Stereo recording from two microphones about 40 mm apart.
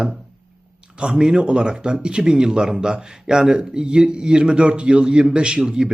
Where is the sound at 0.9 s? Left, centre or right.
Centre.